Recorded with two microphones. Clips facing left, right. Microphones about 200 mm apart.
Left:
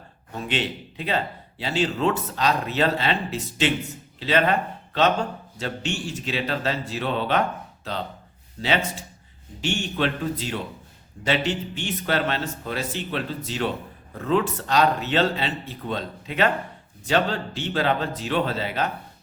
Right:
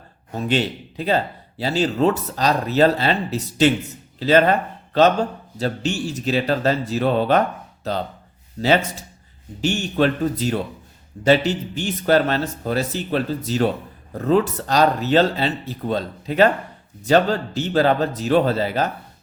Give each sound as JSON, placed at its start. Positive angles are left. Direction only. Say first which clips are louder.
{"t": 0.3, "sound": "speech", "louder": "right 6 dB", "side_deg": -40}
{"t": 5.5, "sound": "speech", "louder": "right 6 dB", "side_deg": -35}
{"t": 8.6, "sound": "speech", "louder": "right 6 dB", "side_deg": -40}